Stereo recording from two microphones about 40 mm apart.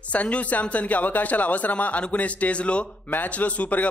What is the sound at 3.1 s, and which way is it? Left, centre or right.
Speech, left.